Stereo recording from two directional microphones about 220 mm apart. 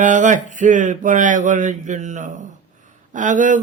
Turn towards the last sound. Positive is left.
turn(degrees=-35)  # may be behind; listen again after turning